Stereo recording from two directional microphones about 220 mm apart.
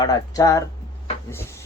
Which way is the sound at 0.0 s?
15° left (ahead or behind).